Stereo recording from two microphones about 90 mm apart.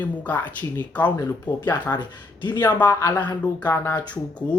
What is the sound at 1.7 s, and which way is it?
Speech, 55° left (ahead or behind).